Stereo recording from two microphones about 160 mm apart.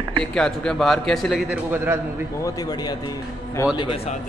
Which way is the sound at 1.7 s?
15° right (ahead or behind).